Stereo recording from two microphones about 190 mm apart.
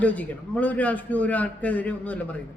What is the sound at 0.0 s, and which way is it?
A man's voice, 10° left (ahead or behind).